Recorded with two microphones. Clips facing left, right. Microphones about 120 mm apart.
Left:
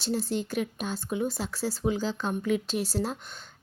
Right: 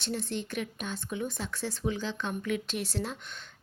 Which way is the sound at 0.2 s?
35° left (ahead or behind).